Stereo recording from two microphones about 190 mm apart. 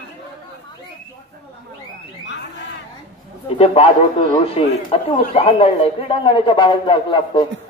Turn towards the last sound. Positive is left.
turn(degrees=25)  # may be behind; listen again after turning